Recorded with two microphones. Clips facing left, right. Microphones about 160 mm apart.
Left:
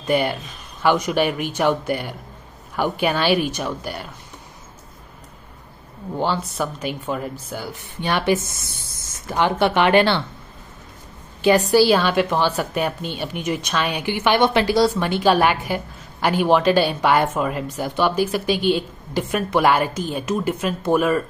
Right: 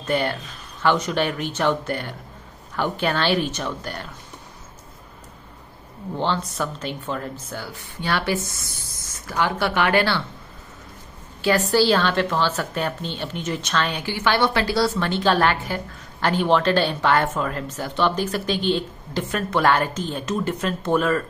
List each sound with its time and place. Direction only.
0.0 s a woman's voice: 15° left (ahead or behind)
6.1 s a woman's voice: 10° left (ahead or behind)
11.4 s a woman's voice: 15° left (ahead or behind)